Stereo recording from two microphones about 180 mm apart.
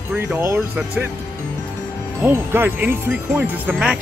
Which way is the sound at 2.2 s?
10° right (ahead or behind).